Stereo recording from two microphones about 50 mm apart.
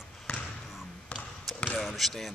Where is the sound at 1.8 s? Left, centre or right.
Centre.